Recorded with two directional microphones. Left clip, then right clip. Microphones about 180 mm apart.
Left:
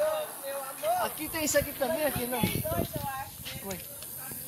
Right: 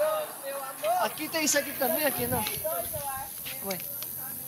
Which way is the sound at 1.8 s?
5° right (ahead or behind).